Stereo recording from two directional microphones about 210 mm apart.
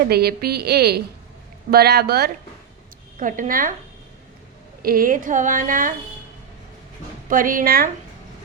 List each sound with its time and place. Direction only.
0.1 s a woman's voice: 50° right (ahead or behind)
4.8 s a woman's voice: 45° right (ahead or behind)
7.3 s a woman's voice: 40° right (ahead or behind)